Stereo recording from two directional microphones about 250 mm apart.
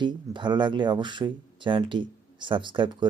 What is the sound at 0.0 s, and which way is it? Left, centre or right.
Speech, centre.